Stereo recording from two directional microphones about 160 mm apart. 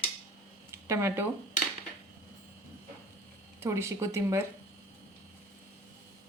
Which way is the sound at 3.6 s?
15° right (ahead or behind).